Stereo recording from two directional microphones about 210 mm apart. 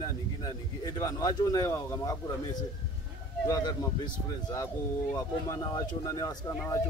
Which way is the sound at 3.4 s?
20° left (ahead or behind).